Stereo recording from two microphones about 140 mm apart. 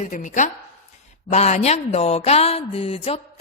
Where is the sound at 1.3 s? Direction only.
50° left (ahead or behind).